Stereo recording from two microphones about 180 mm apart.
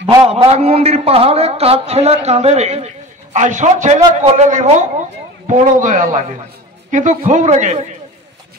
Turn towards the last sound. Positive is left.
turn(degrees=-40)  # may be behind; listen again after turning